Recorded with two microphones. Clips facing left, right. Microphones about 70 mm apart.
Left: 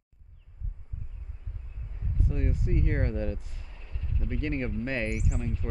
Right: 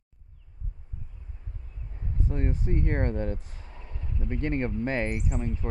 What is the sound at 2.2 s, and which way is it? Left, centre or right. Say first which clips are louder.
Speech: right 2 dB; right.